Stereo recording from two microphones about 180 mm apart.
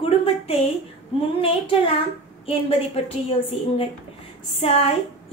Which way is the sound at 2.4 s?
35° left (ahead or behind).